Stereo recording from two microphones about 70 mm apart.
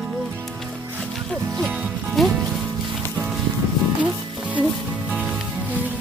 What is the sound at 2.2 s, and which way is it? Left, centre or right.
Music, centre.